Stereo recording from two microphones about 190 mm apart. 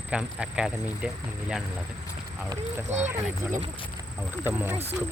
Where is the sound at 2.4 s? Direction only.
15° right (ahead or behind).